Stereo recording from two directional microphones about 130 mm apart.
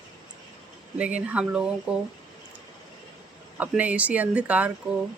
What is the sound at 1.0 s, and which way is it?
Speech, 10° right (ahead or behind).